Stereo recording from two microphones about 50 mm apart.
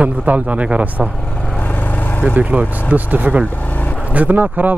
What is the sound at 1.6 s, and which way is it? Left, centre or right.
Vehicle, left.